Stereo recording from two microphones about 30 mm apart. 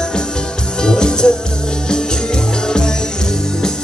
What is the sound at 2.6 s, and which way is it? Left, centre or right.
Music, left.